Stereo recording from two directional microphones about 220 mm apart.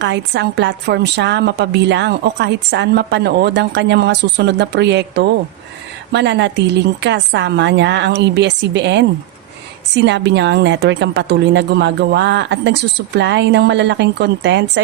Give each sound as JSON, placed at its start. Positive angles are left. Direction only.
{"t": 0.0, "sound": "a woman's voice", "side_deg": -50}